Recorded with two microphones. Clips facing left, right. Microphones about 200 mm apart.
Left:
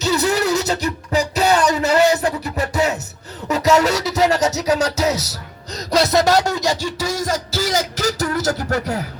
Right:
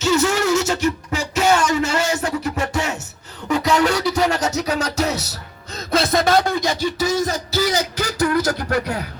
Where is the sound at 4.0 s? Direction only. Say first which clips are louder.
Left 2 dB; 40° left (ahead or behind).